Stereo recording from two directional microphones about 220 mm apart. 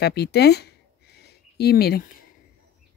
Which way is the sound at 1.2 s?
45° left (ahead or behind).